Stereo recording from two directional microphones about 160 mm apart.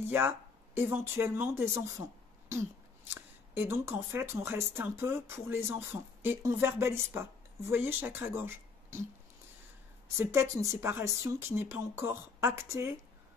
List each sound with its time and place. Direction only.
0.1 s speech: 15° right (ahead or behind)
3.2 s speech: 10° right (ahead or behind)
10.1 s speech: 15° right (ahead or behind)